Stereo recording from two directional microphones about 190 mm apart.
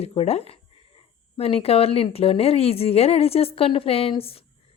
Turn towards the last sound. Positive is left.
turn(degrees=30)  # may be behind; listen again after turning